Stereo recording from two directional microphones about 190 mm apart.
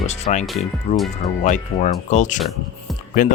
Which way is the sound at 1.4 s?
40° left (ahead or behind).